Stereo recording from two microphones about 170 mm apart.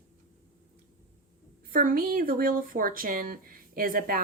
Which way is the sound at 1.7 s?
55° right (ahead or behind).